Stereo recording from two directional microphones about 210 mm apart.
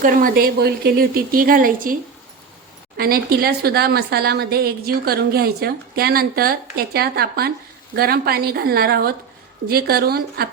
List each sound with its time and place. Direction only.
0.0 s a woman's voice: 40° right (ahead or behind)
3.0 s a woman's voice: 45° right (ahead or behind)